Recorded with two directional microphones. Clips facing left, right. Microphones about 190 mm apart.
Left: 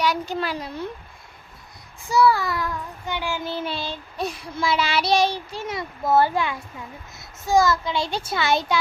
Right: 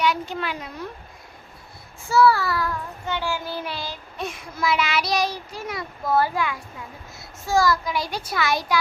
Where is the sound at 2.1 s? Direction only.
15° left (ahead or behind).